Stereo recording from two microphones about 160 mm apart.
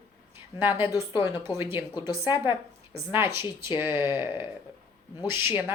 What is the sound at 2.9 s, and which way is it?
Speech, 15° right (ahead or behind).